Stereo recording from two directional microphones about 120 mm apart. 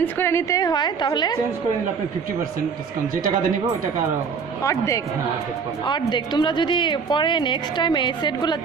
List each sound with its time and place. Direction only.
0.0 s a woman's voice: 20° left (ahead or behind)
4.6 s a woman's voice: 25° left (ahead or behind)
5.9 s a woman's voice: 40° left (ahead or behind)